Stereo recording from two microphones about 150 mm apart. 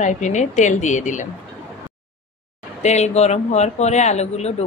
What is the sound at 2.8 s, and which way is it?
Speech, 50° left (ahead or behind).